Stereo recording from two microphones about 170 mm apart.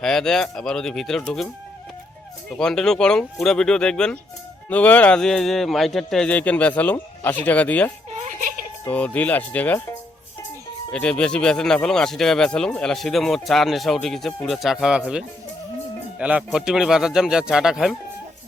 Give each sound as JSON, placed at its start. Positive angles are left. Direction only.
{"t": 0.0, "sound": "speech", "side_deg": 5}
{"t": 2.6, "sound": "speech", "side_deg": 5}
{"t": 8.1, "sound": "music", "side_deg": -55}
{"t": 8.8, "sound": "speech", "side_deg": 10}
{"t": 10.9, "sound": "speech", "side_deg": 5}